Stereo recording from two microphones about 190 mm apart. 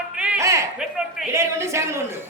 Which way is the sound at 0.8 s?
5° right (ahead or behind).